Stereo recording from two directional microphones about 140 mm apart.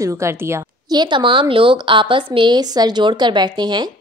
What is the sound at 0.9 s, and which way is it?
A woman's voice, 35° right (ahead or behind).